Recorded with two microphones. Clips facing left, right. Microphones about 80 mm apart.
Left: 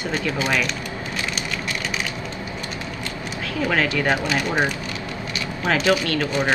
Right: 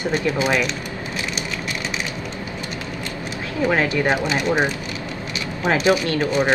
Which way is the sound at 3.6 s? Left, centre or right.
Right.